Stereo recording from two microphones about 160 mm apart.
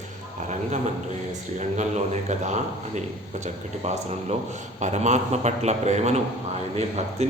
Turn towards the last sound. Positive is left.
turn(degrees=-45)  # may be behind; listen again after turning